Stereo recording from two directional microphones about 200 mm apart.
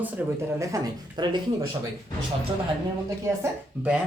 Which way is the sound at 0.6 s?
20° right (ahead or behind).